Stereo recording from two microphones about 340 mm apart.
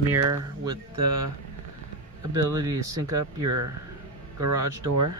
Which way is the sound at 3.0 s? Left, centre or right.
Right.